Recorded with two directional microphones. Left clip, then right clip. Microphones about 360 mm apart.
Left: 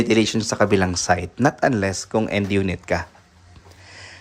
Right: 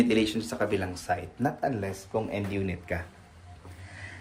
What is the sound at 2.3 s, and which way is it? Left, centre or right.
Speech, centre.